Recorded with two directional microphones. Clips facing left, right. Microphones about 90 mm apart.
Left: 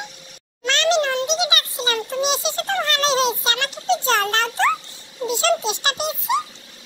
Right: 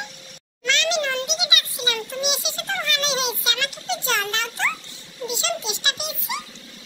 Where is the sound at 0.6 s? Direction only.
35° left (ahead or behind).